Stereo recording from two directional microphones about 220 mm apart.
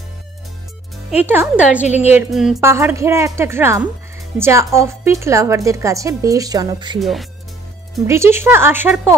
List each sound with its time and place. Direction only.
1.1 s a woman's voice: 10° right (ahead or behind)
1.9 s a woman's voice: 30° left (ahead or behind)
2.1 s music: centre (ahead or behind)
2.7 s a woman's voice: 10° right (ahead or behind)
7.0 s music: centre (ahead or behind)
8.1 s a woman's voice: 10° right (ahead or behind)